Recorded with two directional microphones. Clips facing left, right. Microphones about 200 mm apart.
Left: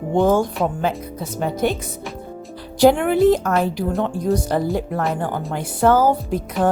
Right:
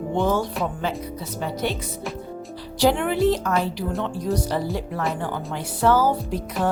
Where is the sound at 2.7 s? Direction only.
50° left (ahead or behind).